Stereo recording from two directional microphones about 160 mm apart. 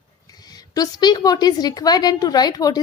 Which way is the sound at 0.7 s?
25° left (ahead or behind).